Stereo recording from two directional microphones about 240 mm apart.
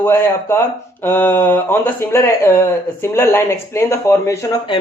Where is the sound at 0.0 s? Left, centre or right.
Centre.